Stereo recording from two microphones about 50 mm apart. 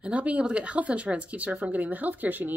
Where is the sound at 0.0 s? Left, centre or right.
Right.